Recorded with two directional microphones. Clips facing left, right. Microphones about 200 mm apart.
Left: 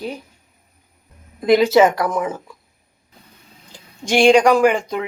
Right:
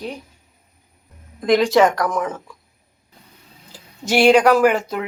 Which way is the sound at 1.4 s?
5° left (ahead or behind).